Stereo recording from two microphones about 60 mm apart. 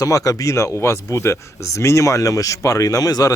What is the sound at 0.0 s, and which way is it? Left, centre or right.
Speech, left.